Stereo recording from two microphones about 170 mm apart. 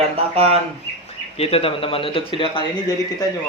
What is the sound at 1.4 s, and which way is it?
A man's voice, 35° left (ahead or behind).